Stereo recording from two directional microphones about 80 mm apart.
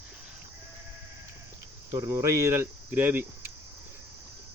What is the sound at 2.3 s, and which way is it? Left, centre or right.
Speech, right.